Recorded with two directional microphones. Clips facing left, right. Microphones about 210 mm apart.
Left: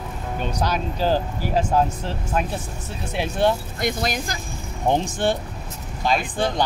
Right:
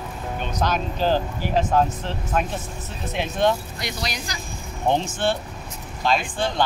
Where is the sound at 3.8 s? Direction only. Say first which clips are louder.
Left 6 dB; 50° left (ahead or behind).